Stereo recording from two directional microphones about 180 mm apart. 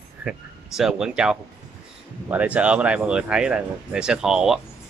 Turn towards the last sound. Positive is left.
turn(degrees=-5)  # may be behind; listen again after turning